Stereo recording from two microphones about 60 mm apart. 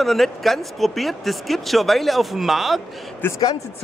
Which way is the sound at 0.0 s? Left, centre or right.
Centre.